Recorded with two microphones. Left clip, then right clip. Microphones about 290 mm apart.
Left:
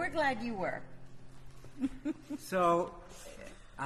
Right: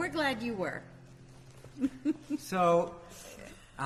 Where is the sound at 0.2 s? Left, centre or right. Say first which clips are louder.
Left 1 dB; left.